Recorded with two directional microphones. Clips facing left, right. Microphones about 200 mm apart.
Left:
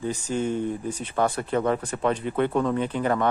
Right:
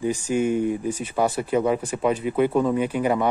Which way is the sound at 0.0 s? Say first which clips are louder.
Right 4 dB; 10° right (ahead or behind).